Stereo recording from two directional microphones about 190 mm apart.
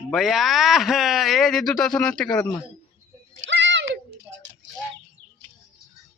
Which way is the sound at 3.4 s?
70° right (ahead or behind).